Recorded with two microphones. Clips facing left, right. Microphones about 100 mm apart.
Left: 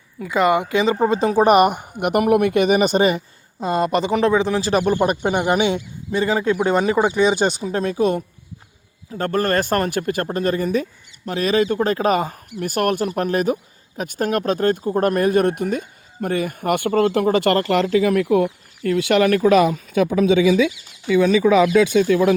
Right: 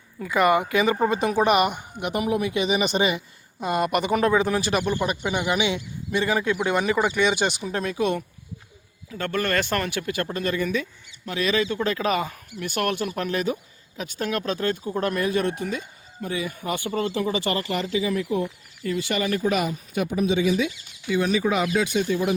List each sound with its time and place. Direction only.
0.3 s speech: 20° left (ahead or behind); by 3.2 s 45° left (ahead or behind)
3.6 s speech: 30° left (ahead or behind)
4.7 s speech: 40° left (ahead or behind)
6.1 s speech: 25° left (ahead or behind); by 20.7 s 90° left
22.0 s speech: 90° left